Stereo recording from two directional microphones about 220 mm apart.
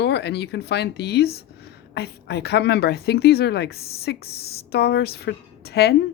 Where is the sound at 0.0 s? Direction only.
50° left (ahead or behind).